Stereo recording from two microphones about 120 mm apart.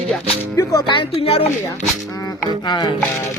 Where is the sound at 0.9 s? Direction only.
45° left (ahead or behind).